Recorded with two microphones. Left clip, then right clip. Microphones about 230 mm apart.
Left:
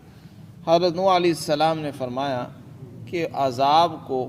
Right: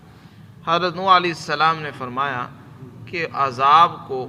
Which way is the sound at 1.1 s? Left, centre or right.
Left.